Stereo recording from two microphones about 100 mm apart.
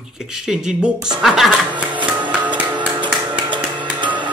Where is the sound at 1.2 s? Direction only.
Centre (ahead or behind).